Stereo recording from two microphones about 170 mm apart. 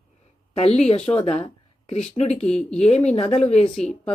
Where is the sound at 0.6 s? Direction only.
40° left (ahead or behind).